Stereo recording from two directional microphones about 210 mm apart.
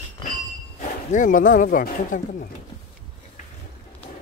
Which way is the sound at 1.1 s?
40° left (ahead or behind).